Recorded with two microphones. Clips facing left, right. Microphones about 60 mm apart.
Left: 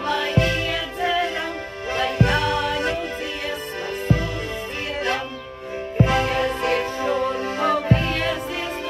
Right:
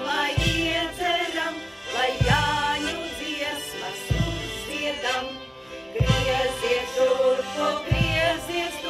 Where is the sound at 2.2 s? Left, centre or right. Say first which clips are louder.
Even; centre.